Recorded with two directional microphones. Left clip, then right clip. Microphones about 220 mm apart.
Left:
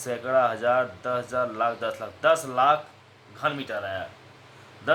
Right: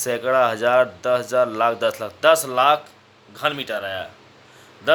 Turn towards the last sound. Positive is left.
turn(degrees=-50)  # may be behind; listen again after turning